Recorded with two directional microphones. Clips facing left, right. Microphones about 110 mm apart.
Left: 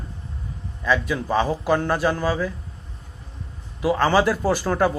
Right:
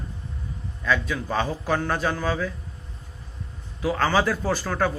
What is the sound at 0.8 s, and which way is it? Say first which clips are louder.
Speech: left 3 dB; 10° left (ahead or behind).